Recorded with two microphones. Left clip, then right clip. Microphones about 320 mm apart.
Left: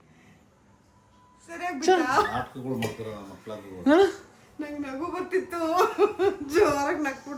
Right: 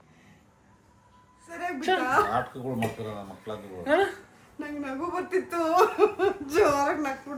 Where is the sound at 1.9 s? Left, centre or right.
Left.